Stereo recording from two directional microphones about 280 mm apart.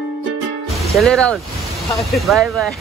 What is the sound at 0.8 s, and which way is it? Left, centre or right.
Speech, centre.